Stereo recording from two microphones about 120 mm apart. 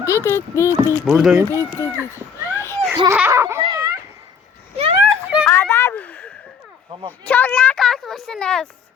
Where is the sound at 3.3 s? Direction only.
25° right (ahead or behind).